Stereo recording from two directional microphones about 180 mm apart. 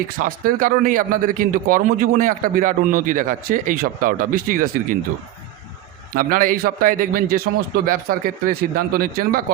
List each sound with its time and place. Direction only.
0.2 s a man's voice: 50° right (ahead or behind)
6.1 s a man's voice: 50° right (ahead or behind)